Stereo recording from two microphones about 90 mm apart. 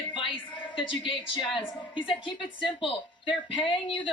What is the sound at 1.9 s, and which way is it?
Speech, 70° left (ahead or behind).